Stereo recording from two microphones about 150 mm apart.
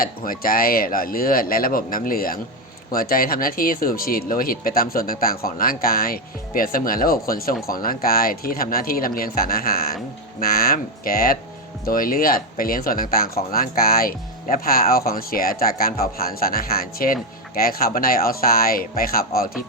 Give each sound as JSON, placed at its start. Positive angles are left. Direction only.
{"t": 0.0, "sound": "speech", "side_deg": 75}